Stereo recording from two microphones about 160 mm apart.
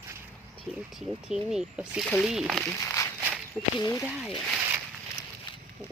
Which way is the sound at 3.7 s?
25° left (ahead or behind).